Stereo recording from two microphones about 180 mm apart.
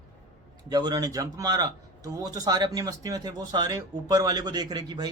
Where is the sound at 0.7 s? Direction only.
20° right (ahead or behind).